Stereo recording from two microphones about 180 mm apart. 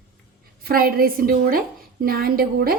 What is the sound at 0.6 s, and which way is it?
A woman's voice, 55° right (ahead or behind).